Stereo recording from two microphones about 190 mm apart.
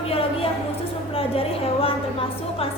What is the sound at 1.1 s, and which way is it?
A woman's voice, 30° left (ahead or behind).